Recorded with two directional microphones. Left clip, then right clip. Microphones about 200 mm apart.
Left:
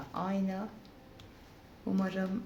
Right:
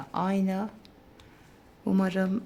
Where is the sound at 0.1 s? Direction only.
55° right (ahead or behind).